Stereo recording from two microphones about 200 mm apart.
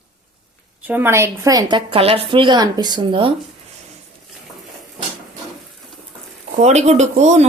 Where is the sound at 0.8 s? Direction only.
10° right (ahead or behind); by 3.3 s 25° right (ahead or behind).